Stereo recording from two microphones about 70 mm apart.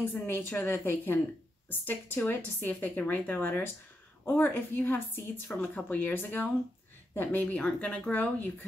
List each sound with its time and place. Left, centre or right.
0.0 s a woman's voice: left
5.5 s speech: centre
5.9 s speech: left